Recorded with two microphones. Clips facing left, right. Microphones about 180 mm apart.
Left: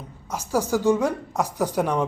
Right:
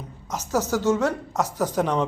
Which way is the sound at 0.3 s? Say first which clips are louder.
Left 1 dB; 10° left (ahead or behind).